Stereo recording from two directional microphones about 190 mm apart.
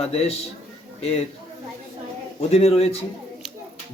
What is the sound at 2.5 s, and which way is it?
Speech, 30° left (ahead or behind).